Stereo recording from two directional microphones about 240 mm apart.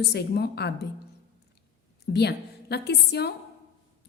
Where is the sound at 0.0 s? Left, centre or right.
Left.